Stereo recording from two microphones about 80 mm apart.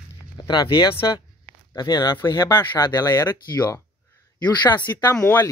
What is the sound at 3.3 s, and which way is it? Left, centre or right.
Speech, left.